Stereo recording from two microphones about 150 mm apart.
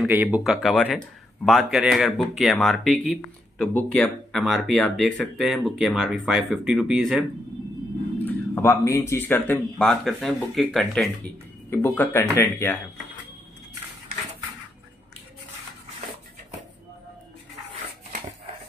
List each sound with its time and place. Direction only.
0.0 s speech: 10° right (ahead or behind)
0.4 s speech: centre (ahead or behind)
8.3 s speech: 15° left (ahead or behind); by 11.1 s centre (ahead or behind)
11.7 s speech: 15° left (ahead or behind)